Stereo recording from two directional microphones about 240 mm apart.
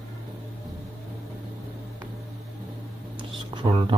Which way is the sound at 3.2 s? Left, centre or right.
Centre.